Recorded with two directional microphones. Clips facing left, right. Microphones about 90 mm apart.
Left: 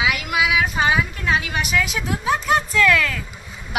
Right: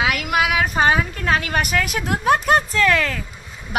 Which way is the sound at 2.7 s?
35° right (ahead or behind).